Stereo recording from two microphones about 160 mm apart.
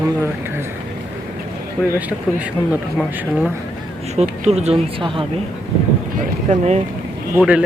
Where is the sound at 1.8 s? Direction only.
Centre (ahead or behind).